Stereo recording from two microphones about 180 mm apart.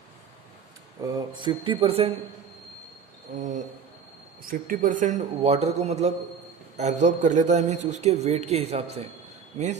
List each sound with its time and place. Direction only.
1.0 s speech: 20° right (ahead or behind)
3.3 s a man's voice: 45° right (ahead or behind)